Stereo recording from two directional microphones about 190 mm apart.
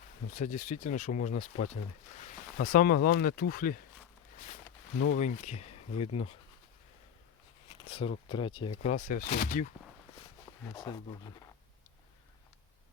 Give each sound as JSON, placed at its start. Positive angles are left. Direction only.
{"t": 0.3, "sound": "speech", "side_deg": 40}
{"t": 5.1, "sound": "speech", "side_deg": 35}
{"t": 7.9, "sound": "speech", "side_deg": 30}
{"t": 8.9, "sound": "speech", "side_deg": 45}
{"t": 10.8, "sound": "speech", "side_deg": 20}